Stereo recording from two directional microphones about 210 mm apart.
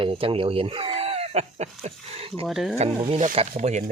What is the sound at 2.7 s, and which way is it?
Speech, 25° right (ahead or behind).